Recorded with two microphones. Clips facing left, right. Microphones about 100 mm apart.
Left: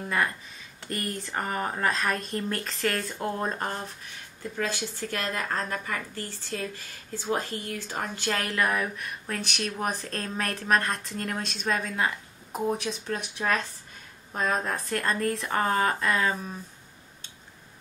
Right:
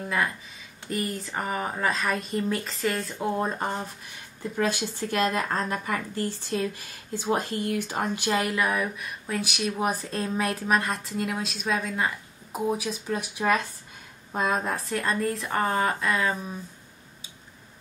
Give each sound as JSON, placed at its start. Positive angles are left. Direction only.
{"t": 0.0, "sound": "speech", "side_deg": 0}